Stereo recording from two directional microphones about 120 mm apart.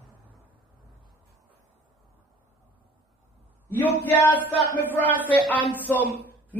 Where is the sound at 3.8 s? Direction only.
15° left (ahead or behind).